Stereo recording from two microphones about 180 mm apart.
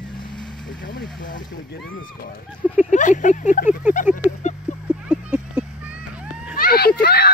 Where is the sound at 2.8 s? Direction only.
45° left (ahead or behind).